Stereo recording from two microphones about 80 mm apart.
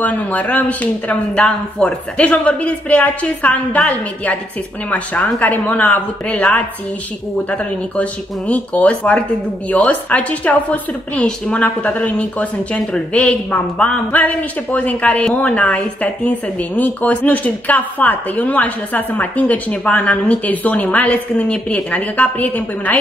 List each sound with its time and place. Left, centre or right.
0.0 s a woman's voice: centre